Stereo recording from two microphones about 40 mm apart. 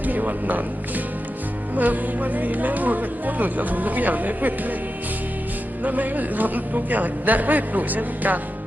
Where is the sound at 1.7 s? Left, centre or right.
Right.